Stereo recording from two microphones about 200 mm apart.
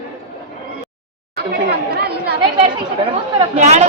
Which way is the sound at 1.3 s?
50° right (ahead or behind).